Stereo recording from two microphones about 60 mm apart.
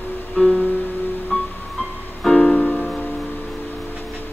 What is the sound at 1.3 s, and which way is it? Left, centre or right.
Music, left.